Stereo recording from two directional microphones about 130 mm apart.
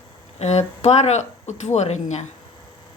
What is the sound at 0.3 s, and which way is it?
Speech, 60° left (ahead or behind).